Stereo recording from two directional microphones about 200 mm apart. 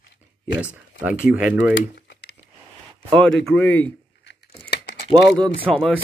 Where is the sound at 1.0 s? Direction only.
5° right (ahead or behind).